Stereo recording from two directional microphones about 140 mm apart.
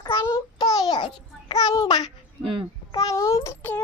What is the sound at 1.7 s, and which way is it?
Babbling, 30° left (ahead or behind).